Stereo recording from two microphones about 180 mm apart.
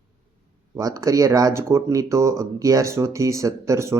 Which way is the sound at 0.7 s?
20° right (ahead or behind).